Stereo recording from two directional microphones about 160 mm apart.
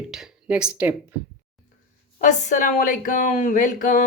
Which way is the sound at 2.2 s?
50° left (ahead or behind).